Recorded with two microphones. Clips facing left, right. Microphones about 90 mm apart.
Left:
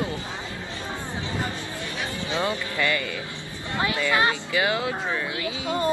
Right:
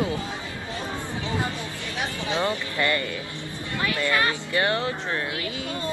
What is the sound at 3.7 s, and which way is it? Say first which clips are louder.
Speech: left 1 dB; 20° left (ahead or behind).